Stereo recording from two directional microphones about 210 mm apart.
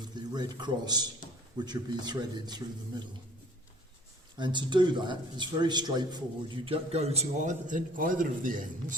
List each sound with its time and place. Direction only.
0.0 s speech: 20° right (ahead or behind)
4.4 s speech: 20° right (ahead or behind); by 9.0 s 40° right (ahead or behind)